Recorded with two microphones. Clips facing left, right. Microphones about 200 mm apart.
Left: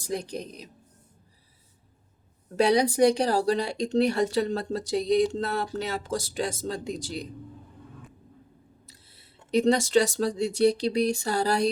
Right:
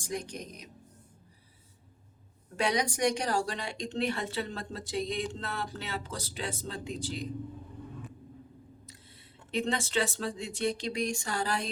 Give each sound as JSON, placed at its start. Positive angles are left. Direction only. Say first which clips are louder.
{"t": 0.0, "sound": "a woman's voice", "louder": "left 5 dB", "side_deg": 35}
{"t": 2.6, "sound": "a woman's voice", "louder": "left 9 dB", "side_deg": 35}
{"t": 8.9, "sound": "speech", "louder": "right 3 dB", "side_deg": 40}